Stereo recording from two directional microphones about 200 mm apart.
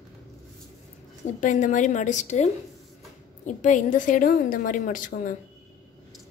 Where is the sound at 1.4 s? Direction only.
40° left (ahead or behind).